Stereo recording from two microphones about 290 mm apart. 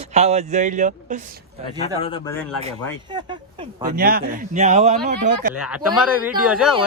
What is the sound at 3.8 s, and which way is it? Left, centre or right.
Speech, right.